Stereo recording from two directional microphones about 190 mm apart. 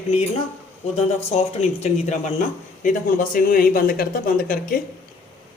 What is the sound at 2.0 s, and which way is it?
A man's voice, 40° left (ahead or behind).